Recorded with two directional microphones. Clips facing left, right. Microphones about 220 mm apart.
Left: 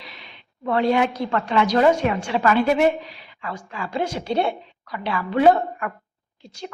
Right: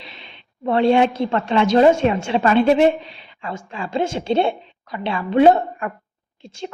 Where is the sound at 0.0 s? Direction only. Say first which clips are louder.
Right 2 dB; 25° right (ahead or behind).